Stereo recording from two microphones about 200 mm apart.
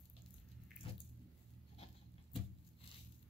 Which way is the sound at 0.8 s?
25° left (ahead or behind).